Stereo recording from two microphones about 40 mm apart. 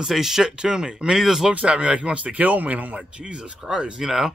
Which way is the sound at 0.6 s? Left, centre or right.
Right.